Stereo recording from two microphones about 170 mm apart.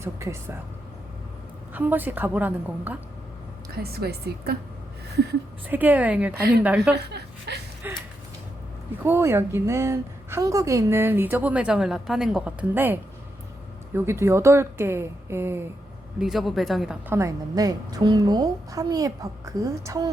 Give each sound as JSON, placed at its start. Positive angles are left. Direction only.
{"t": 0.0, "sound": "a woman's voice", "side_deg": -15}
{"t": 1.7, "sound": "a woman's voice", "side_deg": -10}
{"t": 3.9, "sound": "a woman's voice", "side_deg": -70}
{"t": 5.6, "sound": "a woman's voice", "side_deg": -10}
{"t": 6.9, "sound": "a woman's voice", "side_deg": -80}
{"t": 7.8, "sound": "a sound", "side_deg": -10}
{"t": 9.0, "sound": "a woman's voice", "side_deg": -15}
{"t": 16.2, "sound": "speech", "side_deg": 0}
{"t": 17.2, "sound": "a woman's voice", "side_deg": -20}